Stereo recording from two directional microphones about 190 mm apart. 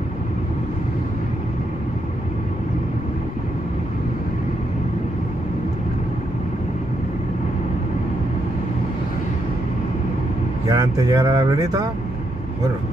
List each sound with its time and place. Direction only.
10.7 s speech: 15° right (ahead or behind)